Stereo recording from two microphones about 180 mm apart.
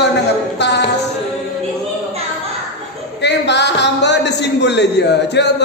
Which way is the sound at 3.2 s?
70° left (ahead or behind).